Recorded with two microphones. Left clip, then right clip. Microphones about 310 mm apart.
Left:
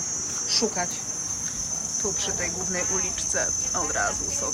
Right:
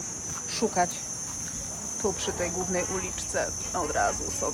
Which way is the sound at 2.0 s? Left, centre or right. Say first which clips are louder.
Right 1 dB; centre.